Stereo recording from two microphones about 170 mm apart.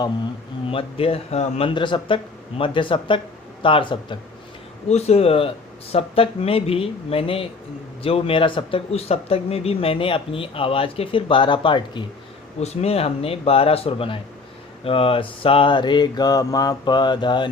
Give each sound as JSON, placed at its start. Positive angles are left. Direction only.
{"t": 0.7, "sound": "speech", "side_deg": 35}
{"t": 12.5, "sound": "speech", "side_deg": 40}
{"t": 14.8, "sound": "mantra", "side_deg": 35}